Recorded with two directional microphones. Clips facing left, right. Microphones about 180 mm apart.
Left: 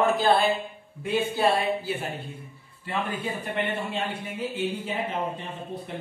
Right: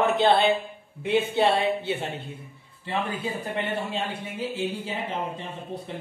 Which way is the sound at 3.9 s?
35° right (ahead or behind).